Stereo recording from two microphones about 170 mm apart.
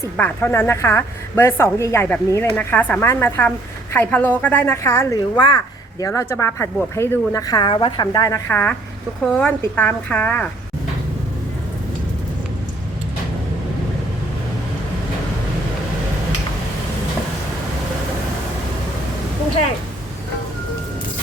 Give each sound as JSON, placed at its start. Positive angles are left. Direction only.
{"t": 0.2, "sound": "a woman's voice", "side_deg": 10}